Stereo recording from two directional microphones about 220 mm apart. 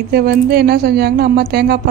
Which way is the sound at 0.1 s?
45° right (ahead or behind).